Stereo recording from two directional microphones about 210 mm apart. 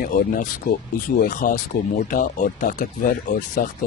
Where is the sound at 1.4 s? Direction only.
45° left (ahead or behind).